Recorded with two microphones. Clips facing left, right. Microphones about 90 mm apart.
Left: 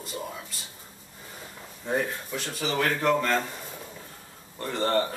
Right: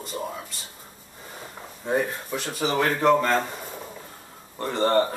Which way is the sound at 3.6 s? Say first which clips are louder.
Right 4 dB; 20° right (ahead or behind).